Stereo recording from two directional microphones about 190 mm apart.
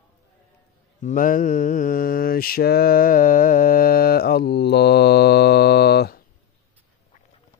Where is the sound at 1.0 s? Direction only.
45° left (ahead or behind).